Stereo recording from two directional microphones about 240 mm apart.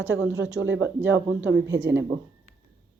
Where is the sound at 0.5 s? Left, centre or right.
Right.